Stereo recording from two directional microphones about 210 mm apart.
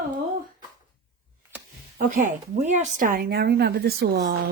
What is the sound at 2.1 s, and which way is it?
Speech, 40° right (ahead or behind).